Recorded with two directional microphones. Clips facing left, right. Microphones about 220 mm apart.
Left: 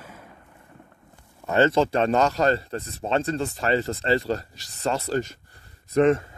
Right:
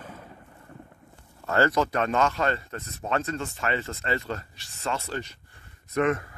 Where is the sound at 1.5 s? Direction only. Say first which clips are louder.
Left 4 dB; 25° left (ahead or behind); by 5.4 s 40° left (ahead or behind).